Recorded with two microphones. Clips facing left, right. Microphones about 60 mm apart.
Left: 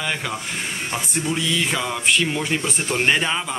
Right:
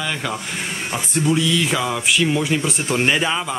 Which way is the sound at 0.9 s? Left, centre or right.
Centre.